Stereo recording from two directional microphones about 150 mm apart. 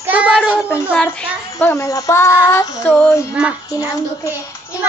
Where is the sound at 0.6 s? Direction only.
10° left (ahead or behind).